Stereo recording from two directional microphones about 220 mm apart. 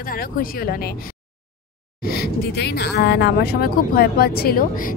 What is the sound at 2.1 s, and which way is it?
Speech, 45° left (ahead or behind).